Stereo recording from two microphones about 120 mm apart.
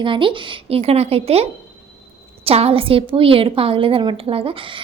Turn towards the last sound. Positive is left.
turn(degrees=-50)  # may be behind; listen again after turning